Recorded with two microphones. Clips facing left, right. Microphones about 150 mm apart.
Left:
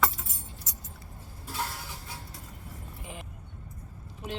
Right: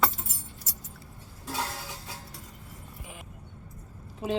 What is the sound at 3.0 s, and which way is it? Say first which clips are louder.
Vehicle: left 4 dB; 5° right (ahead or behind).